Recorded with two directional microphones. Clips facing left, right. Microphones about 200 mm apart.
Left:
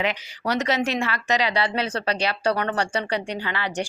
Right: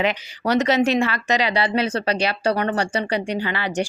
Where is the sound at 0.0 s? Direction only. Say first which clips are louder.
Right 4 dB; 25° right (ahead or behind).